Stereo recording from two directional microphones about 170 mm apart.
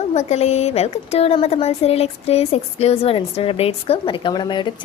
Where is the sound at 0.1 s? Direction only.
40° left (ahead or behind).